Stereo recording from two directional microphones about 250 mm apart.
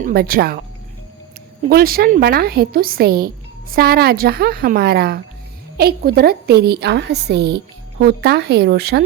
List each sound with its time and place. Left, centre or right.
0.0 s speech: right
1.7 s speech: right